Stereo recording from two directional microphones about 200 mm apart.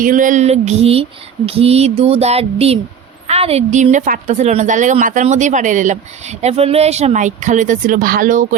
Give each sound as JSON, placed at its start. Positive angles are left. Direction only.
{"t": 0.0, "sound": "a woman's voice", "side_deg": -40}
{"t": 1.5, "sound": "a sound", "side_deg": -30}
{"t": 3.2, "sound": "a woman's voice", "side_deg": -30}